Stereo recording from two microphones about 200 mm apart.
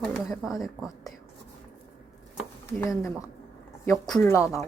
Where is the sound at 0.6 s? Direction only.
Centre (ahead or behind).